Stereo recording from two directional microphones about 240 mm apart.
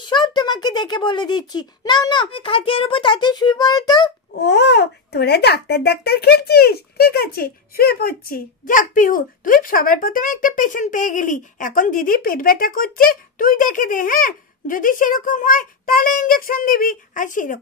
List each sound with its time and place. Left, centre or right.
0.0 s a child's voice: centre
4.4 s a child's voice: left